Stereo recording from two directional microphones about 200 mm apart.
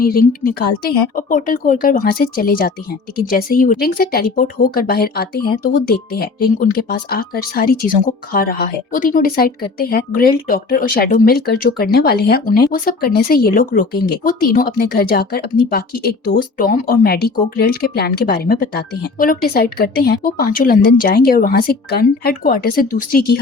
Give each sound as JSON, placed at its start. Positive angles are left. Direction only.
{"t": 0.0, "sound": "speech", "side_deg": 45}